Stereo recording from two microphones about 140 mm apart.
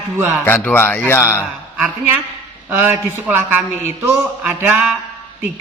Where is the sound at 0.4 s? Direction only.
15° left (ahead or behind).